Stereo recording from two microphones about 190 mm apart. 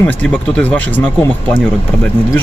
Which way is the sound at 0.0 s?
10° left (ahead or behind).